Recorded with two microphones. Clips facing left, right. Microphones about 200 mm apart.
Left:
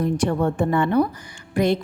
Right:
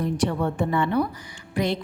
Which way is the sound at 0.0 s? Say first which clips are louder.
Left 3 dB; 50° left (ahead or behind).